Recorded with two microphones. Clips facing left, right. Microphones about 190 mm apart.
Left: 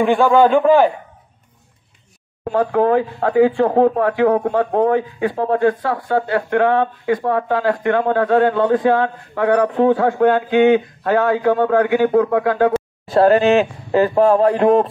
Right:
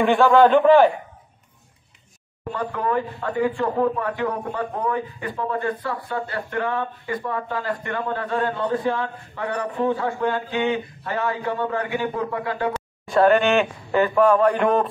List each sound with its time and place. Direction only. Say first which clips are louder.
0.0 s a man's voice: left 2 dB; centre (ahead or behind)
2.5 s speech: left 9 dB; 70° left (ahead or behind)
13.1 s speech: left 4 dB; 35° left (ahead or behind)